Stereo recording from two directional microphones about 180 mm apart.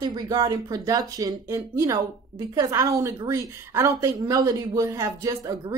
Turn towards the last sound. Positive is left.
turn(degrees=-20)  # may be behind; listen again after turning